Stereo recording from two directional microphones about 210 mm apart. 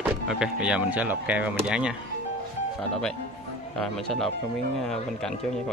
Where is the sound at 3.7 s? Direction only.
Centre (ahead or behind).